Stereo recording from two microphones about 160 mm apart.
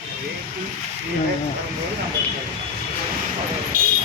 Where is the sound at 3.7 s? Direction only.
60° right (ahead or behind).